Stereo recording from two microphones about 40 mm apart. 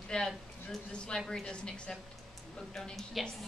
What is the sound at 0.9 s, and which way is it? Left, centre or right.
A woman's voice, left.